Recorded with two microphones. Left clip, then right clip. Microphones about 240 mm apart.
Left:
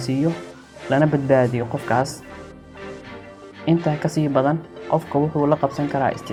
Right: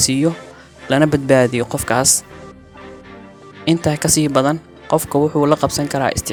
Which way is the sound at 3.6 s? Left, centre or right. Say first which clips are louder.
Right 4 dB; right.